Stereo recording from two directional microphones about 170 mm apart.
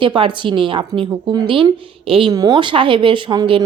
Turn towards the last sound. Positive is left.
turn(degrees=-25)  # may be behind; listen again after turning